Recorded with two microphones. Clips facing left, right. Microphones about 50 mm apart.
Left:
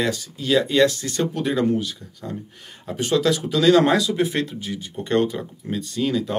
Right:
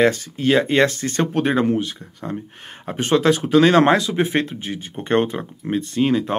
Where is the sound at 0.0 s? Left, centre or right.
Right.